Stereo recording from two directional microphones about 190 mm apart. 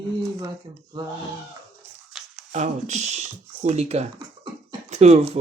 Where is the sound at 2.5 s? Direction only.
40° right (ahead or behind).